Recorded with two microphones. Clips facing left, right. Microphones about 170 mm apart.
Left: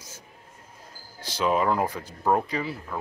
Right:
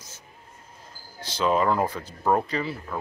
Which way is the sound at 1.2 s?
10° left (ahead or behind).